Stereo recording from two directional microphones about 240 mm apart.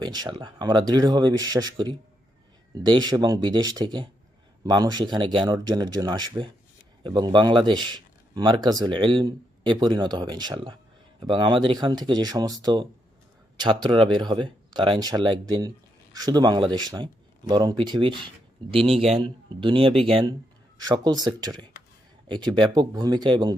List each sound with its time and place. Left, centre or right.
0.0 s speech: centre